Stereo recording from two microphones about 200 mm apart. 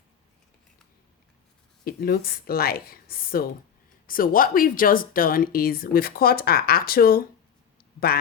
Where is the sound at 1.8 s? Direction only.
50° left (ahead or behind).